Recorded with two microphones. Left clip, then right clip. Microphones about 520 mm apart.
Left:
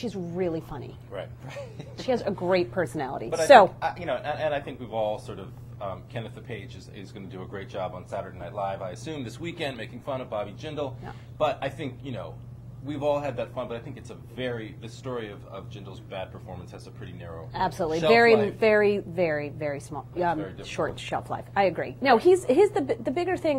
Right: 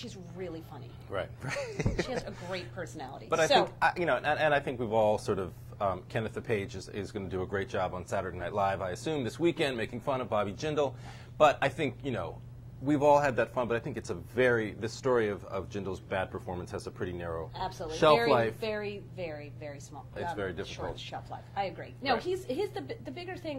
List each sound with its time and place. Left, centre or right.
0.0 s a woman's voice: left
1.1 s speech: right
2.0 s a woman's voice: left
3.8 s speech: right
17.6 s a woman's voice: left
17.8 s speech: right
18.6 s a woman's voice: left
20.3 s speech: right
20.7 s a woman's voice: left